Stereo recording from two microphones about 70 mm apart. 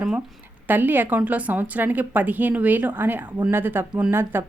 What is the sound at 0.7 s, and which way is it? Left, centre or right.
A woman's voice, right.